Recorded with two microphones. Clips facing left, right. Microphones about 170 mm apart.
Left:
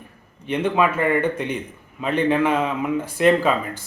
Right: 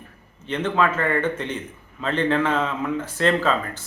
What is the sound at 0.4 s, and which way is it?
A man's voice, 15° left (ahead or behind).